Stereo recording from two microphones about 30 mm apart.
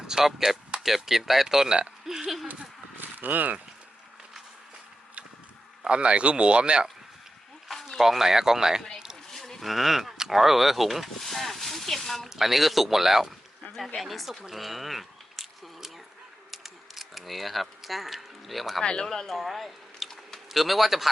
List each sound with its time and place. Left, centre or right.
0.1 s speech: centre
2.0 s burping: centre
2.9 s livestock: right
5.9 s speech: right
7.7 s a sound: centre
7.9 s speech: centre
9.3 s a sound: centre
9.6 s speech: centre
11.2 s speech: centre
12.4 s speech: centre
13.7 s speech: centre
14.5 s a sound: centre
19.0 s speech: centre
19.4 s speech: centre